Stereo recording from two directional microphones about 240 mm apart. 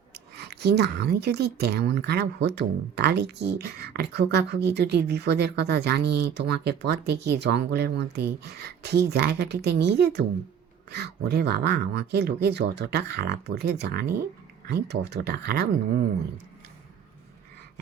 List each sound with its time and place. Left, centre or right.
0.1 s speech: right